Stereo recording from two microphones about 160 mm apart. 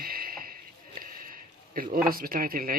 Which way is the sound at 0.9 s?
60° right (ahead or behind).